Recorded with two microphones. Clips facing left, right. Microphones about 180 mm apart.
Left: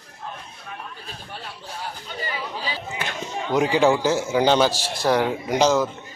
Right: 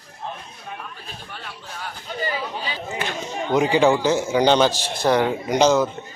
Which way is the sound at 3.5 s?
Centre (ahead or behind).